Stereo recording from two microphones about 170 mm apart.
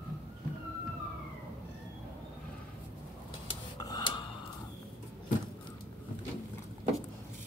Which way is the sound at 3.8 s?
20° left (ahead or behind).